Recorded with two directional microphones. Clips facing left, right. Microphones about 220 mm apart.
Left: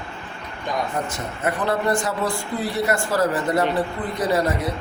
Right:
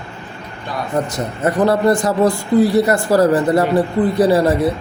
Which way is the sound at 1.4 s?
40° right (ahead or behind).